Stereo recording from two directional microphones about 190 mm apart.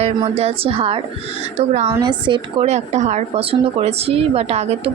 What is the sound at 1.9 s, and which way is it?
Speech, 25° right (ahead or behind).